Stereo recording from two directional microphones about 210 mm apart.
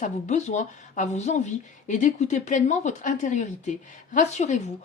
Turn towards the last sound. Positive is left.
turn(degrees=35)  # may be behind; listen again after turning